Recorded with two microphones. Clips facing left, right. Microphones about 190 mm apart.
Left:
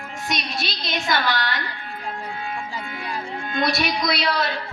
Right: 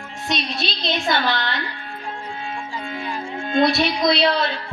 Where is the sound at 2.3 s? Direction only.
25° right (ahead or behind).